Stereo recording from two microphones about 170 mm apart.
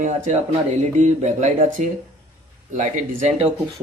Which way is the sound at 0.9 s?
45° right (ahead or behind).